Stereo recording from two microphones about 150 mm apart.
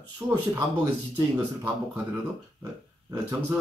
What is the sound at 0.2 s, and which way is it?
Speech, 20° right (ahead or behind).